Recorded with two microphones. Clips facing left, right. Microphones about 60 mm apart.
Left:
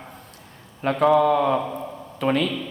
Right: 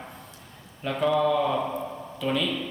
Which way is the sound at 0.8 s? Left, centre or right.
Left.